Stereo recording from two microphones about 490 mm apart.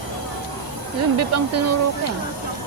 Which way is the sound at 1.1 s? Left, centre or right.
Right.